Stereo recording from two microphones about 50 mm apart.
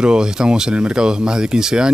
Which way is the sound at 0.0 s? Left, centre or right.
Centre.